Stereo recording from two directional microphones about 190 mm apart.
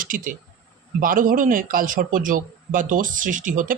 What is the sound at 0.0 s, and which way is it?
Speech, 45° right (ahead or behind).